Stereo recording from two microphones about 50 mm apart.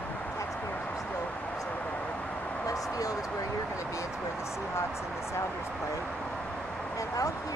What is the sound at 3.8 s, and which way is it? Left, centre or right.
Speech, left.